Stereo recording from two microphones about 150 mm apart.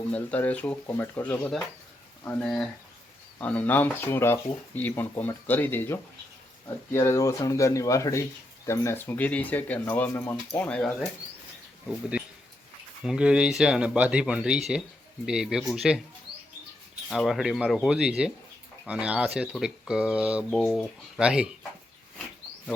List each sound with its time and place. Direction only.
0.1 s speech: 10° left (ahead or behind)
13.1 s speech: 5° right (ahead or behind)
17.1 s speech: centre (ahead or behind)